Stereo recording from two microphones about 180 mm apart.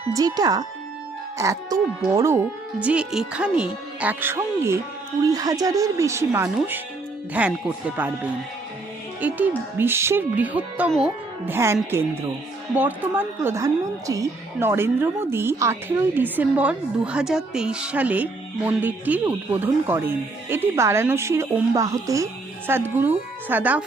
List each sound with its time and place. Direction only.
0.1 s a woman's voice: 20° right (ahead or behind)